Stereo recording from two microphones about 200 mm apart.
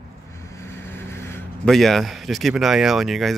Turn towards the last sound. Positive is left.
turn(degrees=0)  # may be behind; listen again after turning